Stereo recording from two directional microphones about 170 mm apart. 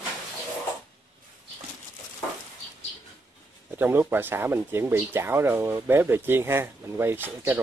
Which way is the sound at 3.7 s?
10° right (ahead or behind).